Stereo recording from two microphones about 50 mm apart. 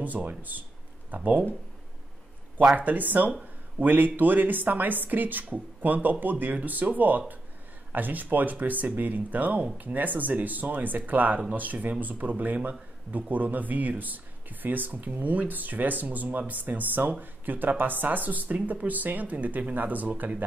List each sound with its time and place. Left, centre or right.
0.0 s speech: right
2.7 s speech: right